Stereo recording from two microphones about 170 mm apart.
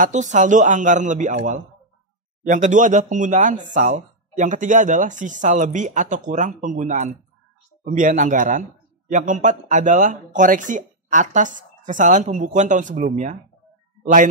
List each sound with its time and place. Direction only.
0.0 s speech: 45° right (ahead or behind)